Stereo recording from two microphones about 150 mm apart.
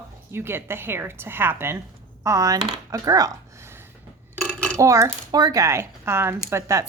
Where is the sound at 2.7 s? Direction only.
25° right (ahead or behind).